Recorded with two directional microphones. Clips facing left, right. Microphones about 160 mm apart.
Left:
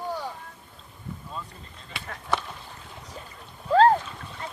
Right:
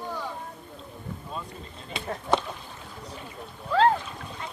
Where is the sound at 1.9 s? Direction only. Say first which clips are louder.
Right 4 dB; 20° right (ahead or behind).